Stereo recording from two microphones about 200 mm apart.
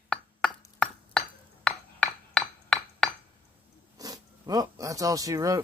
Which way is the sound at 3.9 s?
20° right (ahead or behind).